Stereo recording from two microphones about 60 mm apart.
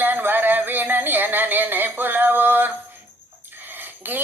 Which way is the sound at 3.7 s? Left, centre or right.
Right.